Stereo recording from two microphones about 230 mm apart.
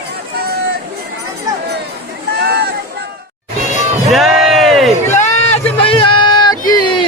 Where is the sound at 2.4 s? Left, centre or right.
Right.